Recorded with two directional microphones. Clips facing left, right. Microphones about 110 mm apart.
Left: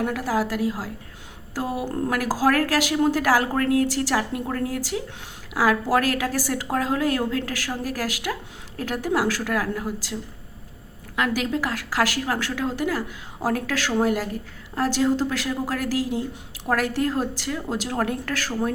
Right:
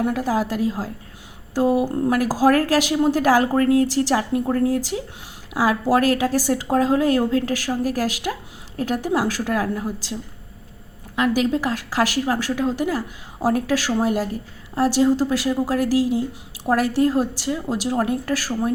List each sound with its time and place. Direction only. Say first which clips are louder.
0.0 s a woman's voice: right 3 dB; 20° right (ahead or behind)
11.1 s a woman's voice: right 4 dB; 20° right (ahead or behind)